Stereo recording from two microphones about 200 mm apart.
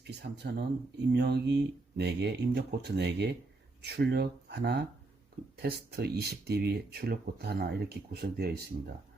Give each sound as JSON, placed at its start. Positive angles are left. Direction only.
{"t": 0.0, "sound": "speech", "side_deg": -55}